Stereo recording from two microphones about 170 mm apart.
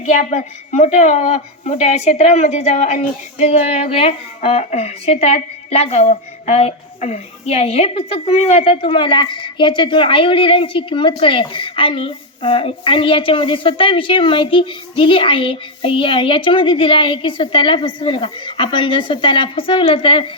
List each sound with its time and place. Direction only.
0.0 s a woman's voice: 45° left (ahead or behind)